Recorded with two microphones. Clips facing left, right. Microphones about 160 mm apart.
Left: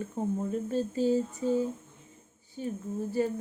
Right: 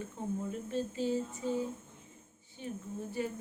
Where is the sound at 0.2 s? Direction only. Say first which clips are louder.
Left 7 dB; 45° left (ahead or behind).